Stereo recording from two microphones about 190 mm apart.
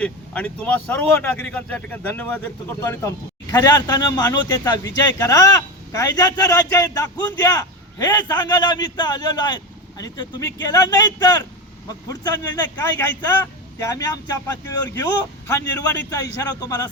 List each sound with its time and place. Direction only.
0.0 s speech: 5° left (ahead or behind)